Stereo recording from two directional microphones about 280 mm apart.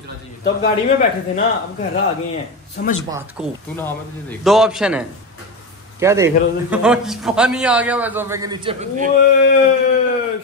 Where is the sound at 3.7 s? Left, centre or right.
Centre.